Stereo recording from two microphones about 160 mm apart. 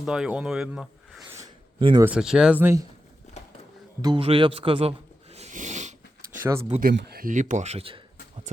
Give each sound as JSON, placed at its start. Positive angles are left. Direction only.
{"t": 0.0, "sound": "speech", "side_deg": -5}
{"t": 1.8, "sound": "speech", "side_deg": -30}
{"t": 2.0, "sound": "speech", "side_deg": -5}
{"t": 4.0, "sound": "a sound", "side_deg": -35}
{"t": 6.4, "sound": "speech", "side_deg": -15}
{"t": 6.7, "sound": "speech", "side_deg": -60}
{"t": 7.3, "sound": "speech", "side_deg": -50}